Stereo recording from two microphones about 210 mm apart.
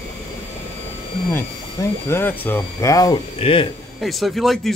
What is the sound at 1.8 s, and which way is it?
Speech, 15° left (ahead or behind).